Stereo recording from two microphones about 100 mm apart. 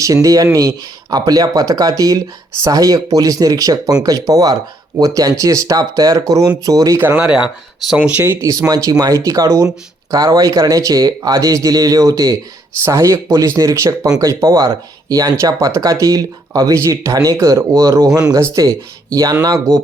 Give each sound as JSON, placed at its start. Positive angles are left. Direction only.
{"t": 0.0, "sound": "speech", "side_deg": -35}
{"t": 6.9, "sound": "speech", "side_deg": -20}
{"t": 7.3, "sound": "speech", "side_deg": -10}
{"t": 8.2, "sound": "speech", "side_deg": -25}